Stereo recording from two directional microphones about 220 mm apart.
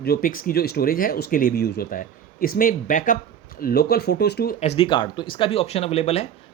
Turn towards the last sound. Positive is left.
turn(degrees=30)  # may be behind; listen again after turning